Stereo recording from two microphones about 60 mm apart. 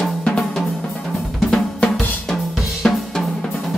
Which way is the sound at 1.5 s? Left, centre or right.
Centre.